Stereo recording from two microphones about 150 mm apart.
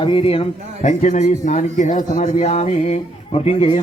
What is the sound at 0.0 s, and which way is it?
A man's voice, 40° left (ahead or behind).